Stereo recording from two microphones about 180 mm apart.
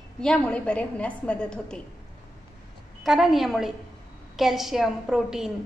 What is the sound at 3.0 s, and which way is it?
A woman's voice, centre (ahead or behind).